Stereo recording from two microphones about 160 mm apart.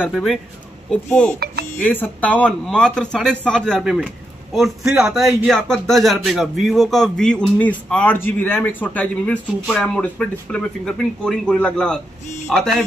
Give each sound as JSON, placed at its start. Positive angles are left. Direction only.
{"t": 0.1, "sound": "speech", "side_deg": 0}
{"t": 1.4, "sound": "a sound", "side_deg": -80}
{"t": 1.8, "sound": "speech", "side_deg": 10}